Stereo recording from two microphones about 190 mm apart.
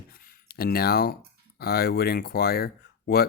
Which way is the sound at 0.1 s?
55° left (ahead or behind).